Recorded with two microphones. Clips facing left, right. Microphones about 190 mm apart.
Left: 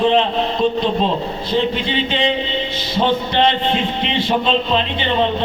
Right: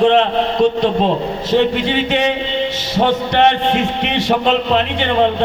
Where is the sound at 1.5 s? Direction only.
70° right (ahead or behind).